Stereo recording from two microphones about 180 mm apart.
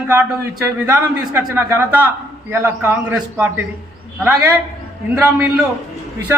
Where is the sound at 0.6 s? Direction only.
15° right (ahead or behind).